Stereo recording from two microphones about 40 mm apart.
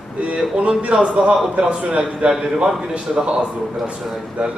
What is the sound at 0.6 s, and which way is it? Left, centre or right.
Speech, right.